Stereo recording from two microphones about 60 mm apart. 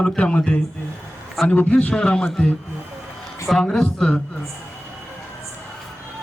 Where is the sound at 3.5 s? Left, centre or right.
Centre.